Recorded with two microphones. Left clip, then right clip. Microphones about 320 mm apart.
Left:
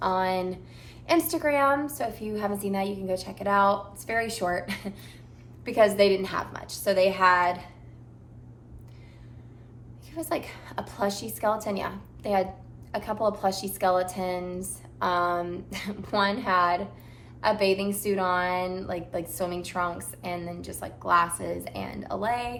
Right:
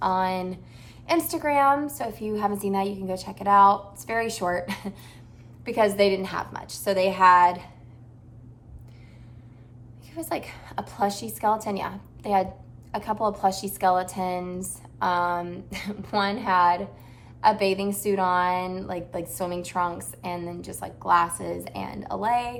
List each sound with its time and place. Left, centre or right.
0.0 s a woman's voice: centre
10.2 s a woman's voice: centre